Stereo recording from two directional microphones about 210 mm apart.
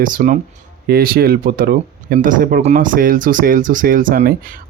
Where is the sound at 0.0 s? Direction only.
40° right (ahead or behind).